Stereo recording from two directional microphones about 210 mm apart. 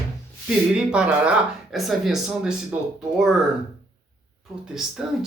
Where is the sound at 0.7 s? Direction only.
5° right (ahead or behind).